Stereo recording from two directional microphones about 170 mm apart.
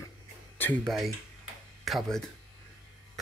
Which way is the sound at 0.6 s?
10° left (ahead or behind).